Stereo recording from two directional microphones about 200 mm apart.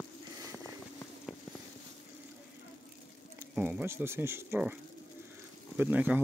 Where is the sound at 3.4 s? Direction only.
10° right (ahead or behind).